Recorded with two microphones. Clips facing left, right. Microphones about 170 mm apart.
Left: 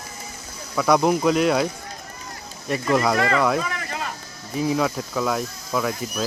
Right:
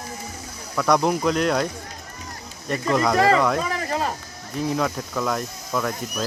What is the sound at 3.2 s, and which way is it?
Speech, 35° right (ahead or behind).